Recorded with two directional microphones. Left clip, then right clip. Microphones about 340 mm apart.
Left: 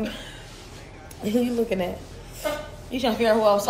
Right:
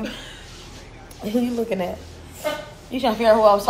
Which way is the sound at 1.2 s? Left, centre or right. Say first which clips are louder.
Even; centre.